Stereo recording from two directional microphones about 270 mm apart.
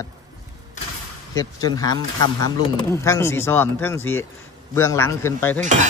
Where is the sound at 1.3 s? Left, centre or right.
Centre.